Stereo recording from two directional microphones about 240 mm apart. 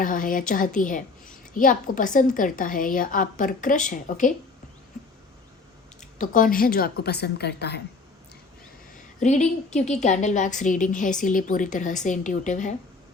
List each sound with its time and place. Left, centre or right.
0.0 s a woman's voice: left
6.0 s a woman's voice: left
9.2 s a woman's voice: left